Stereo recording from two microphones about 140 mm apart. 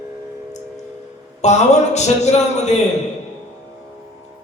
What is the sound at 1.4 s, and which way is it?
A man's voice, 55° left (ahead or behind).